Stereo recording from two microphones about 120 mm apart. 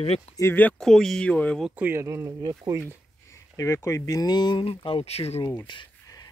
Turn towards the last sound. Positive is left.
turn(degrees=40)  # may be behind; listen again after turning